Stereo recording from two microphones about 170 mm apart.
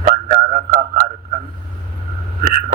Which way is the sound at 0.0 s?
45° right (ahead or behind).